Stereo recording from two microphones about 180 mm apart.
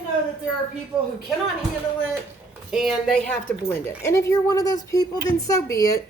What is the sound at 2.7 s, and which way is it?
A woman's voice, centre (ahead or behind).